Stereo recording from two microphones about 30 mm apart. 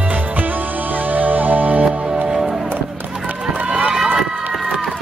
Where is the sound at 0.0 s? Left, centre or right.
Right.